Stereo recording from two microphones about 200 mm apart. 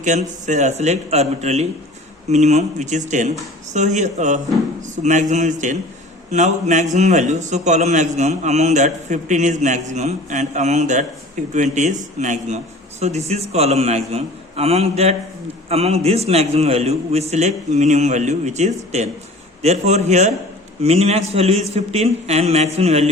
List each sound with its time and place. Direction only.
0.0 s a man's voice: 35° right (ahead or behind)